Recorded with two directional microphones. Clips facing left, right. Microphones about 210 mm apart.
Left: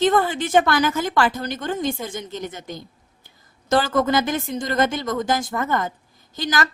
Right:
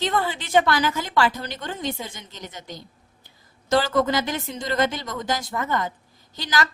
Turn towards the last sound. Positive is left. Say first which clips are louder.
# left 2 dB
turn(degrees=50)  # may be behind; listen again after turning